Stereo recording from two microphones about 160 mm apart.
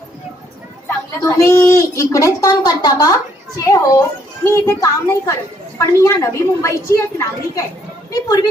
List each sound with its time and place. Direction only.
1.2 s a child's voice: 15° left (ahead or behind)